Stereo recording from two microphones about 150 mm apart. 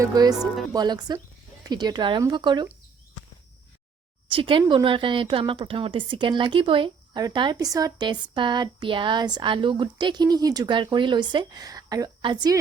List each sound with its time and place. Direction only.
0.0 s speech: 25° right (ahead or behind)
4.3 s a woman's voice: 35° right (ahead or behind)